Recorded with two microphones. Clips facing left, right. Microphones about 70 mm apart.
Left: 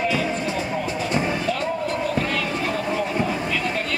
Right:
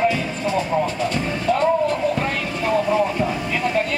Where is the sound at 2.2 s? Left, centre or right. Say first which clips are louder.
Even; right.